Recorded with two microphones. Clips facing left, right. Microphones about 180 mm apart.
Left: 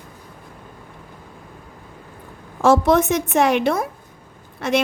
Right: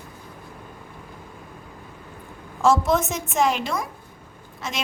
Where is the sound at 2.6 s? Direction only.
65° left (ahead or behind).